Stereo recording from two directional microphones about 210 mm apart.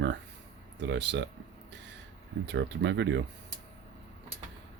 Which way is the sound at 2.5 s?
55° right (ahead or behind).